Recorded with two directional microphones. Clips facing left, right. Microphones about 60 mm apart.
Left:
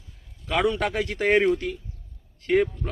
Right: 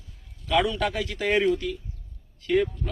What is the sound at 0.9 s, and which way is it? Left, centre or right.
Speech, left.